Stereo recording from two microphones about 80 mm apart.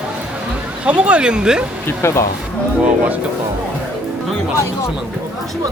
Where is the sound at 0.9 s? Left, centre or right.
Centre.